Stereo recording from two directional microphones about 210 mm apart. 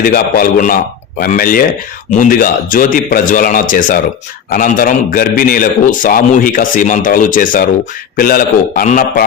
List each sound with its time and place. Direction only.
0.0 s a man's voice: 45° left (ahead or behind)